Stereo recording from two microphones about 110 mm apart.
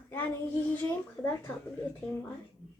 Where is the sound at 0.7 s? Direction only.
15° left (ahead or behind).